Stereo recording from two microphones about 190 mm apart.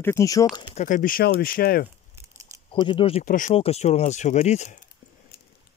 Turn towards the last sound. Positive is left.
turn(degrees=35)  # may be behind; listen again after turning